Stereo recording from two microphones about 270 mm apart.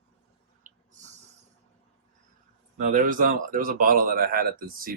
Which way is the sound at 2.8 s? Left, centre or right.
Right.